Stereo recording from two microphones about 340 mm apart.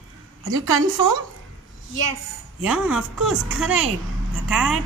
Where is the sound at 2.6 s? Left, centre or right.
Centre.